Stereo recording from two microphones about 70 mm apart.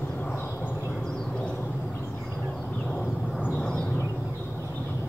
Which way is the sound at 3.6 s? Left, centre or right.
Centre.